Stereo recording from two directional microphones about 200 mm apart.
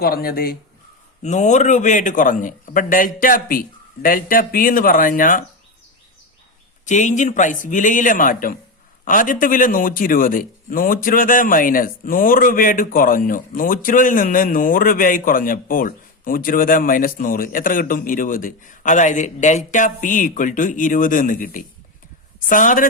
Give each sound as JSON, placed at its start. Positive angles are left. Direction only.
{"t": 0.0, "sound": "a man's voice", "side_deg": 50}
{"t": 1.2, "sound": "a man's voice", "side_deg": 35}
{"t": 6.8, "sound": "a man's voice", "side_deg": 35}